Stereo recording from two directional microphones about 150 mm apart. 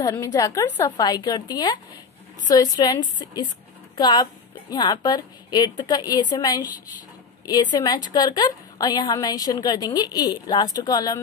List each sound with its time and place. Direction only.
0.3 s a woman's voice: 25° left (ahead or behind)